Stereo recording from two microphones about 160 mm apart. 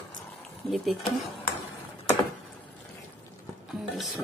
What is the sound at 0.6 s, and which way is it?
Speech, centre (ahead or behind).